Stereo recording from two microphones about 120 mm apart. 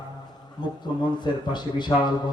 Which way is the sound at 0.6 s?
35° left (ahead or behind).